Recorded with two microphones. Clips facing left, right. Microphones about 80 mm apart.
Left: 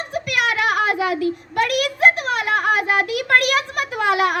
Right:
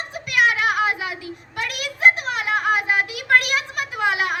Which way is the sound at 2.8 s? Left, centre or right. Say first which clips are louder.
Left 2 dB; centre.